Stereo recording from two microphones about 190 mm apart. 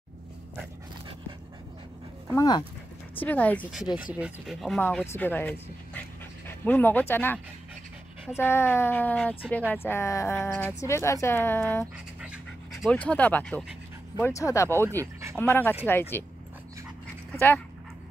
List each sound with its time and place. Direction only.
2.3 s speech: 20° left (ahead or behind)
3.2 s speech: 10° left (ahead or behind)
8.4 s speech: 10° left (ahead or behind)
12.2 s pant: 5° right (ahead or behind); by 14.9 s 15° left (ahead or behind)
14.9 s speech: 15° right (ahead or behind)
15.3 s speech: 10° left (ahead or behind)